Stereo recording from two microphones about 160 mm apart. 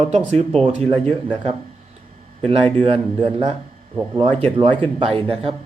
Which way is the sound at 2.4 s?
35° right (ahead or behind).